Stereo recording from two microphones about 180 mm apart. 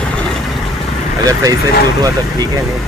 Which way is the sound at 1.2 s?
20° right (ahead or behind).